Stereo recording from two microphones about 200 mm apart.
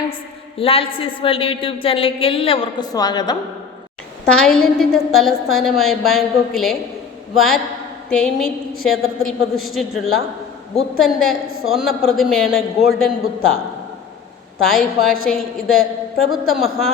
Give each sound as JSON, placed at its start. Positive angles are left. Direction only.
{"t": 0.6, "sound": "a woman's voice", "side_deg": 25}
{"t": 4.3, "sound": "a woman's voice", "side_deg": 5}
{"t": 14.6, "sound": "a woman's voice", "side_deg": 0}